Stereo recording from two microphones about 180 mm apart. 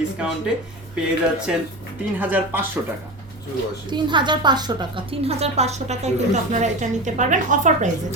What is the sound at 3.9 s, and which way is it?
A woman's voice, 25° right (ahead or behind).